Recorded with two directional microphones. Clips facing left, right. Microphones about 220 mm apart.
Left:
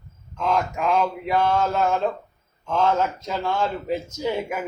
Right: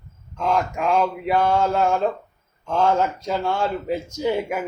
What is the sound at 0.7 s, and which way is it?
Speech, 10° right (ahead or behind).